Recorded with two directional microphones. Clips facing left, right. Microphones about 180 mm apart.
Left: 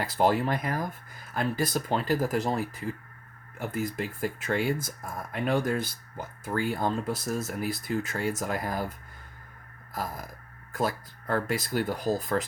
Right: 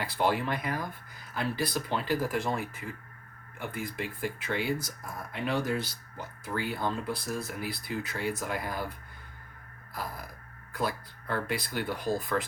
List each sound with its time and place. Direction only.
0.0 s speech: 40° left (ahead or behind)